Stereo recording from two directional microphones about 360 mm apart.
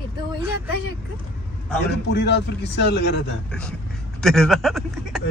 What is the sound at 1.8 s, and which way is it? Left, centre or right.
A man's voice, left.